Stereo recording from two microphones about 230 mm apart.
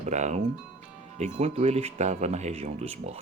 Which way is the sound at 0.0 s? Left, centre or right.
Right.